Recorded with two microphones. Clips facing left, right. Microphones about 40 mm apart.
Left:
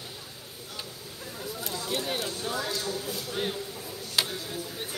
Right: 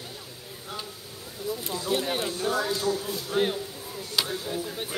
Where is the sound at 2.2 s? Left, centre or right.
Right.